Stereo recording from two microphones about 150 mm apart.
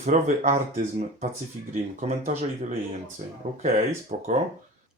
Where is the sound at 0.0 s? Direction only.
55° right (ahead or behind).